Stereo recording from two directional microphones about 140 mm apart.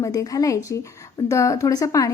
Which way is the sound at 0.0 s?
25° left (ahead or behind).